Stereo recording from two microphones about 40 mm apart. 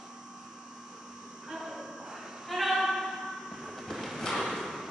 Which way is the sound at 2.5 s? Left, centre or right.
Centre.